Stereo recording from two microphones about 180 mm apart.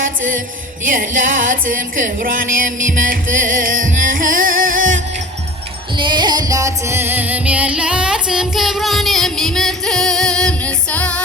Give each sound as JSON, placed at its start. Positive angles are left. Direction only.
{"t": 0.0, "sound": "music", "side_deg": -50}
{"t": 4.8, "sound": "music", "side_deg": -90}
{"t": 6.0, "sound": "music", "side_deg": -25}